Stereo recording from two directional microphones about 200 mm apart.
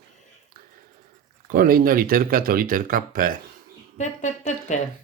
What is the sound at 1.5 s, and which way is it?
Speech, 45° right (ahead or behind).